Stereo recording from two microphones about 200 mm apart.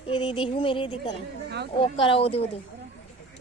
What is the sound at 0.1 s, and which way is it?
Speech, 25° left (ahead or behind).